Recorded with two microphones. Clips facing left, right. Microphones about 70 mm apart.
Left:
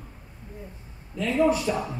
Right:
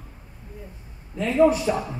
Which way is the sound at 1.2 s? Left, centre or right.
Right.